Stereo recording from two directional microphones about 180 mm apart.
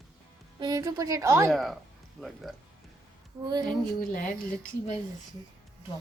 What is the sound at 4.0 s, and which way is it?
Speech, 50° left (ahead or behind).